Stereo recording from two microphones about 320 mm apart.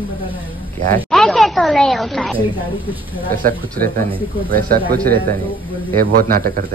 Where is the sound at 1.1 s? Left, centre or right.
Centre.